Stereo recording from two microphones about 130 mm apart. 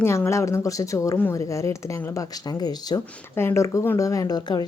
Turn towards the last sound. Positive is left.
turn(degrees=30)  # may be behind; listen again after turning